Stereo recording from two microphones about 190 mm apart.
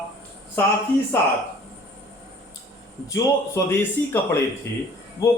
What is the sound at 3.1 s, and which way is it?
A man's voice, 15° left (ahead or behind).